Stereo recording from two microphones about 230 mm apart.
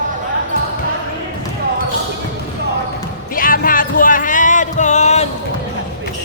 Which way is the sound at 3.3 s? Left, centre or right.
Left.